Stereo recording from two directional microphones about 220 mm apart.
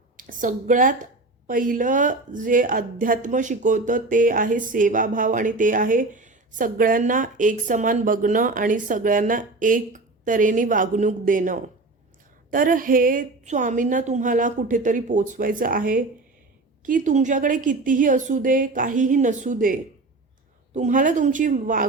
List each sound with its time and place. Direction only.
0.2 s a woman's voice: 35° right (ahead or behind)